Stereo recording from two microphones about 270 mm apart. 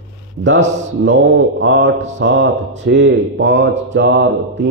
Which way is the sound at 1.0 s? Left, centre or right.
Right.